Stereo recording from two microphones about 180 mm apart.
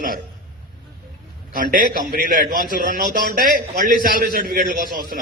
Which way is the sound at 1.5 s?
50° right (ahead or behind).